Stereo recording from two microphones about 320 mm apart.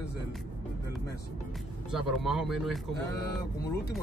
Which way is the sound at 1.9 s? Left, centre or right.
Centre.